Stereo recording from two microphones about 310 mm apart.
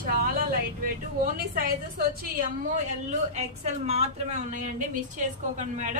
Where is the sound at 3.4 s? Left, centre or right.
Right.